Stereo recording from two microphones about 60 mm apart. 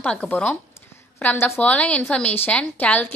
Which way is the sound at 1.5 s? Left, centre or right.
Left.